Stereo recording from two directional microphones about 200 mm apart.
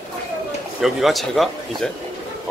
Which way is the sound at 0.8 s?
Centre (ahead or behind).